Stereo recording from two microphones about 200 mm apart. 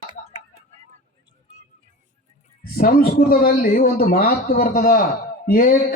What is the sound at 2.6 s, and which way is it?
Speech, 45° left (ahead or behind).